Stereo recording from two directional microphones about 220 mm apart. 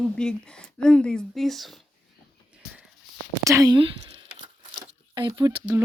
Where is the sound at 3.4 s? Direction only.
15° right (ahead or behind).